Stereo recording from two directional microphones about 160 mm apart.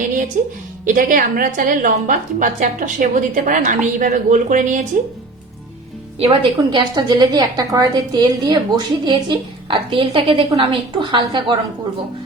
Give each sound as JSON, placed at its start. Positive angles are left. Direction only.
{"t": 0.4, "sound": "a woman's voice", "side_deg": -55}
{"t": 6.2, "sound": "a woman's voice", "side_deg": -25}